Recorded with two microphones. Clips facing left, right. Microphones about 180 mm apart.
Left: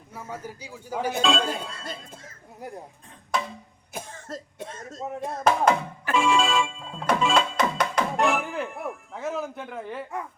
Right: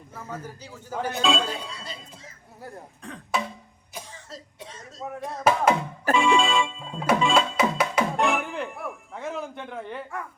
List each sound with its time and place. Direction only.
0.1 s speech: 10° left (ahead or behind)
1.2 s speech: centre (ahead or behind)
1.5 s speech: 50° left (ahead or behind)
2.6 s speech: 15° left (ahead or behind)
3.9 s speech: 50° left (ahead or behind)
5.0 s a sound: 20° left (ahead or behind)
5.4 s music: 5° right (ahead or behind)
8.9 s speech: centre (ahead or behind)